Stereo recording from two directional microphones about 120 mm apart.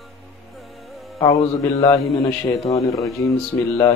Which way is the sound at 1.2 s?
30° left (ahead or behind).